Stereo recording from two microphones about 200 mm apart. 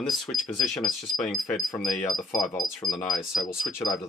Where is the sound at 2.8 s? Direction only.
20° left (ahead or behind).